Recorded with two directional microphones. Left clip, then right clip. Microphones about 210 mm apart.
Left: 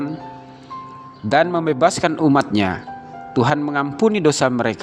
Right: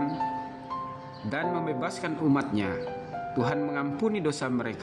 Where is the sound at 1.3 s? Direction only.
45° left (ahead or behind).